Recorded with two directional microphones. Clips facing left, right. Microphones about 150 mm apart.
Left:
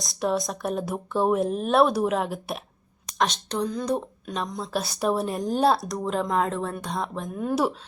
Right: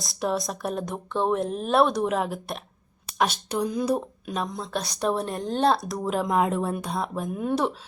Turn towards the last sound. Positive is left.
turn(degrees=0)  # may be behind; listen again after turning